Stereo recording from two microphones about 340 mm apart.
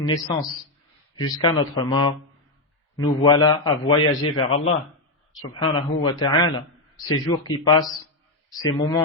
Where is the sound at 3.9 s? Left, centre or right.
Left.